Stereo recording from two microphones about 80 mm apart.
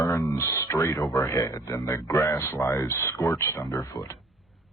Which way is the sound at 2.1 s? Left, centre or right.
Left.